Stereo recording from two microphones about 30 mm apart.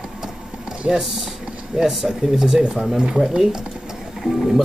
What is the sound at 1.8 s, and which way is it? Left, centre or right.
Speech, centre.